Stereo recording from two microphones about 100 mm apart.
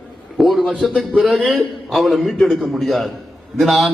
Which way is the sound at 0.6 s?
10° left (ahead or behind).